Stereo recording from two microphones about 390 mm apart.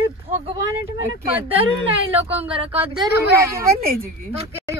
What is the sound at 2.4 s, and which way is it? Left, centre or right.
Speech, centre.